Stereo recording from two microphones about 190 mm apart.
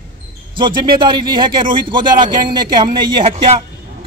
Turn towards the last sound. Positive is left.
turn(degrees=-25)  # may be behind; listen again after turning